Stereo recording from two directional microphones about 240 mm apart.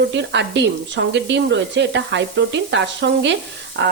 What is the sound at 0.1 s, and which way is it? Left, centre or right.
Speech, right.